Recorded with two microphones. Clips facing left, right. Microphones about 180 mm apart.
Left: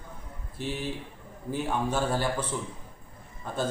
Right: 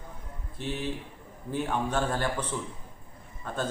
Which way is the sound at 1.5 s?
10° left (ahead or behind).